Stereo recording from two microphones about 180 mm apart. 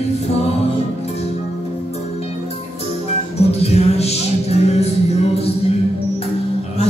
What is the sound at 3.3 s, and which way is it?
Music, 35° left (ahead or behind).